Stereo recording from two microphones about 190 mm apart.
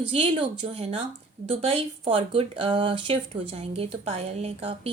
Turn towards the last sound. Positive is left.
turn(degrees=-35)  # may be behind; listen again after turning